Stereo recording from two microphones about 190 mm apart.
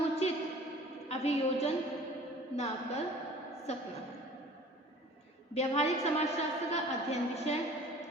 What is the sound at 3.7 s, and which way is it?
Speech, 35° left (ahead or behind).